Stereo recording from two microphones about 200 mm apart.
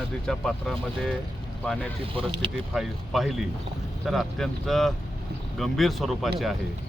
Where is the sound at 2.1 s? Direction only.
25° right (ahead or behind).